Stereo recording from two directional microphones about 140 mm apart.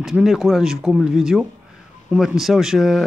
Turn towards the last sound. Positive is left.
turn(degrees=-5)  # may be behind; listen again after turning